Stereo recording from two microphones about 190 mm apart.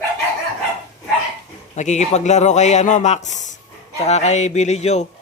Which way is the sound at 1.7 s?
40° left (ahead or behind).